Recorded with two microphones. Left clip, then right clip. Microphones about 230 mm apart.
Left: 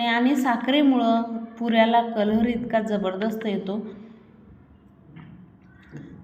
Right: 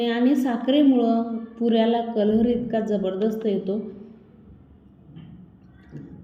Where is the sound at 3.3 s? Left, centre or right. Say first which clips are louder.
Right 3 dB; left.